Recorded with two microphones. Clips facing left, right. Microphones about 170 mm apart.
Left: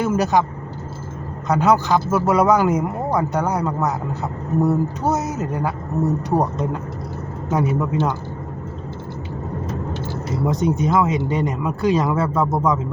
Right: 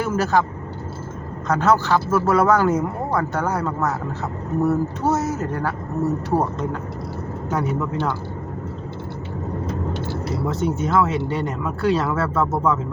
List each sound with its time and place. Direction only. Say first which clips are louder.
0.0 s speech: left 2 dB; 15° left (ahead or behind)
1.5 s a man's voice: left 1 dB; 15° left (ahead or behind)
10.4 s a man's voice: left 4 dB; 15° left (ahead or behind)